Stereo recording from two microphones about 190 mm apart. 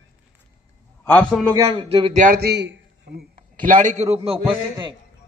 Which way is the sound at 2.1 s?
45° right (ahead or behind).